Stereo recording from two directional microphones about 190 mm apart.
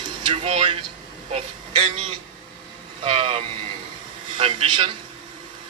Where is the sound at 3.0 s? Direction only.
30° right (ahead or behind).